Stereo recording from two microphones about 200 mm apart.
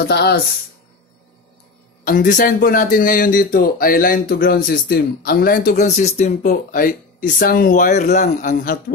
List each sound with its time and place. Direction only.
0.0 s speech: 55° left (ahead or behind)
2.0 s speech: 40° left (ahead or behind)